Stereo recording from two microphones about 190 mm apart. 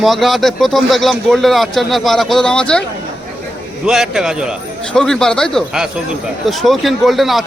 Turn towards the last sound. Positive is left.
turn(degrees=0)  # may be behind; listen again after turning